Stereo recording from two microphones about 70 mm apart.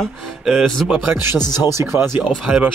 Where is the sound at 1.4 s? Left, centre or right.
Left.